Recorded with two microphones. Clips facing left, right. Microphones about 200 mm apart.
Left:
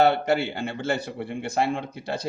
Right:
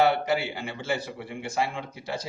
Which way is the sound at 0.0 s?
65° left (ahead or behind).